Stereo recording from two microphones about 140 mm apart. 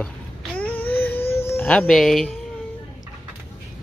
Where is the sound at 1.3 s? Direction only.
15° left (ahead or behind).